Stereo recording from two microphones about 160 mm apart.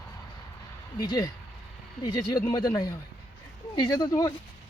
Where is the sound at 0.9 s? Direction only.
25° left (ahead or behind).